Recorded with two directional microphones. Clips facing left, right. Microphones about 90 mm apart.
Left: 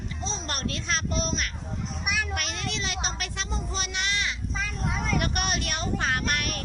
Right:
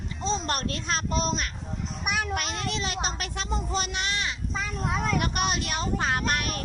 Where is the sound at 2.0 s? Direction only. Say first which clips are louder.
Right 1 dB; 45° right (ahead or behind).